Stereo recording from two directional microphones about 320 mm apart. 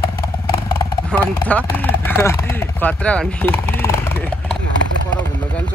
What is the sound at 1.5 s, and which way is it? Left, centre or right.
Speech, centre.